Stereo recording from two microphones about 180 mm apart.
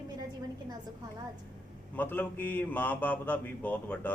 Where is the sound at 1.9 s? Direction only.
10° left (ahead or behind).